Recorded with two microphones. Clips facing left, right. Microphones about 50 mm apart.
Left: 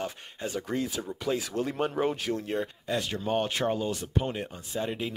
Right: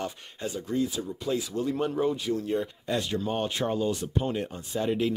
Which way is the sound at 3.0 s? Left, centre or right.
Left.